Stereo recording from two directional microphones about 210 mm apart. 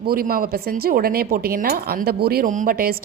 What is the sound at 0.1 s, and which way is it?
A woman's voice, 45° right (ahead or behind).